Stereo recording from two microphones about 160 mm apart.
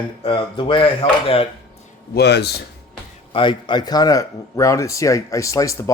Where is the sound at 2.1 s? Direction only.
90° left.